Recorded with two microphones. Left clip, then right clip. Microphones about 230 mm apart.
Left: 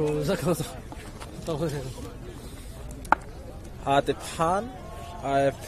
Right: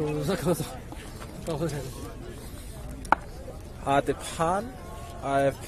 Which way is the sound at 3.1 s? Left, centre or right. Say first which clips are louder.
Left 1 dB; centre.